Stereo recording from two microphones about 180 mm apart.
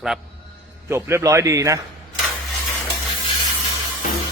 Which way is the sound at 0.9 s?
15° right (ahead or behind).